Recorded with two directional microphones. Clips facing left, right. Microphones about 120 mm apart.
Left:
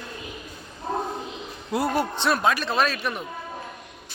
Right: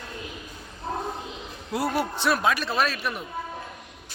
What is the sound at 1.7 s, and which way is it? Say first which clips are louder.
A man's voice: left 2 dB; 5° right (ahead or behind).